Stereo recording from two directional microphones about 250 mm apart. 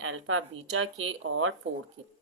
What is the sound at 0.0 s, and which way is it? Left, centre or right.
Speech, right.